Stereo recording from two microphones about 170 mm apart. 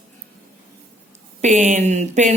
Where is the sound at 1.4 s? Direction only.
45° right (ahead or behind).